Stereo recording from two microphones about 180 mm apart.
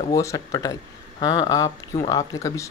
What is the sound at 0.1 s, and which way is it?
Speech, 15° left (ahead or behind).